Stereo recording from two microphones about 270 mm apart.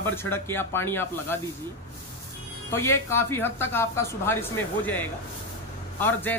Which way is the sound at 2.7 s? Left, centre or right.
Centre.